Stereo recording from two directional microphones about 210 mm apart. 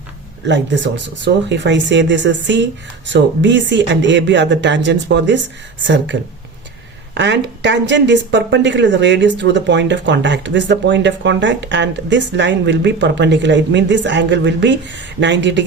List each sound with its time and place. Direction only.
0.4 s speech: 60° right (ahead or behind)